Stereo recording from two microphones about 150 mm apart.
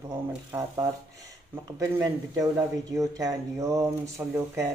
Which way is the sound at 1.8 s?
20° right (ahead or behind).